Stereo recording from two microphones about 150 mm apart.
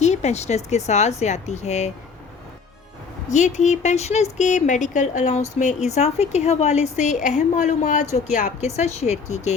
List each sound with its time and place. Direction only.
0.0 s speech: 50° left (ahead or behind)
3.2 s speech: 55° left (ahead or behind)